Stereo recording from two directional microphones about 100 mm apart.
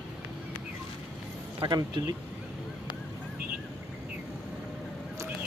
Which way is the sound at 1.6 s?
45° right (ahead or behind).